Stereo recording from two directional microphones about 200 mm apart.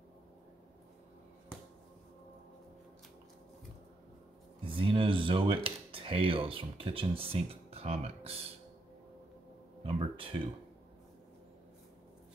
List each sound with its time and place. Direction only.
4.6 s speech: 25° right (ahead or behind)
9.8 s speech: 25° right (ahead or behind)